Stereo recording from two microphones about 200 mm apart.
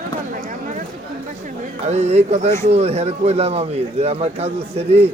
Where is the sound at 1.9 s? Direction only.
35° right (ahead or behind).